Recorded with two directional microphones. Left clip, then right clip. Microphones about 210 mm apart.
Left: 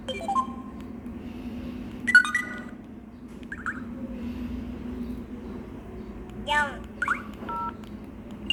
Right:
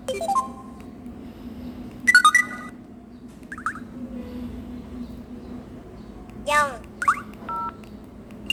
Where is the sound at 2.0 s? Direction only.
30° right (ahead or behind).